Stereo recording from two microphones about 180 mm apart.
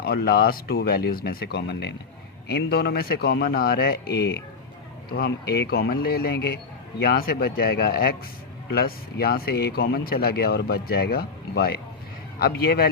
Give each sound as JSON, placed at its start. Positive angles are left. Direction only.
{"t": 0.0, "sound": "speech", "side_deg": 60}